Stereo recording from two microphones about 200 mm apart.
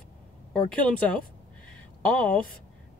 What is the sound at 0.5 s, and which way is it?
Speech, 5° left (ahead or behind).